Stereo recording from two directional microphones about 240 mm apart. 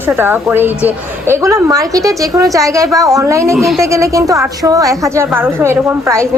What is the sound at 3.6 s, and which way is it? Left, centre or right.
Speech, centre.